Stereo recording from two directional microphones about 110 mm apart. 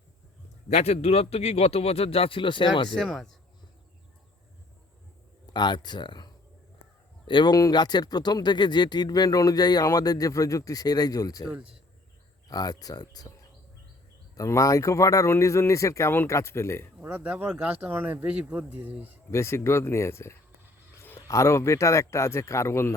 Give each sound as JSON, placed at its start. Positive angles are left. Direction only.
{"t": 0.7, "sound": "a man's voice", "side_deg": 85}
{"t": 2.9, "sound": "speech", "side_deg": 0}
{"t": 5.5, "sound": "speech", "side_deg": 45}
{"t": 11.4, "sound": "speech", "side_deg": -10}
{"t": 12.5, "sound": "speech", "side_deg": 35}
{"t": 14.3, "sound": "speech", "side_deg": 30}
{"t": 17.0, "sound": "speech", "side_deg": -20}
{"t": 19.3, "sound": "speech", "side_deg": 25}